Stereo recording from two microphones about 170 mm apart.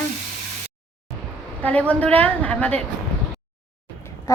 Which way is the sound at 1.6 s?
10° left (ahead or behind).